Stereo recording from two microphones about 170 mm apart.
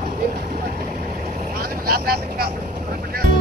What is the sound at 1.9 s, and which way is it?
Vehicle, 65° right (ahead or behind).